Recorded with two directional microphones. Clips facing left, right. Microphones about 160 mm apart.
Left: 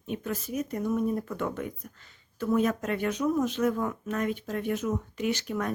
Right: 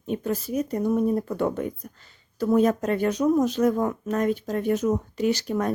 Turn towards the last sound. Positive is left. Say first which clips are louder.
# right 6 dB
turn(degrees=-35)  # may be behind; listen again after turning